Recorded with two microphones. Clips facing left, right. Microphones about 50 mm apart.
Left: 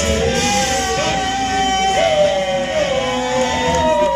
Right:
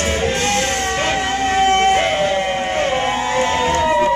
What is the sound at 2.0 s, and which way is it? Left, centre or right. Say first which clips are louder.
Music: left 3 dB; centre.